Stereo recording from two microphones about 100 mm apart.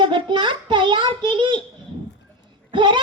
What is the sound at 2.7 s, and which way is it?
Speech, 55° right (ahead or behind).